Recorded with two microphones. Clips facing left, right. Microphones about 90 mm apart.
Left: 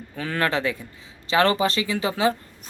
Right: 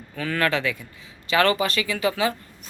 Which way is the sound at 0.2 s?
25° left (ahead or behind).